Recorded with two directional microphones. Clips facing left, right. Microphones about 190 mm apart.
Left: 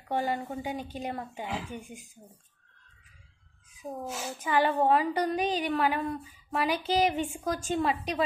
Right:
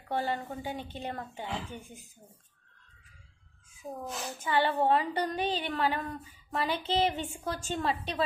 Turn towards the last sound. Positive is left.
turn(degrees=10)  # may be behind; listen again after turning